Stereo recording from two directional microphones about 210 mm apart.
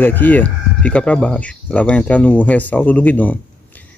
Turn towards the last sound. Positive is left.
turn(degrees=10)  # may be behind; listen again after turning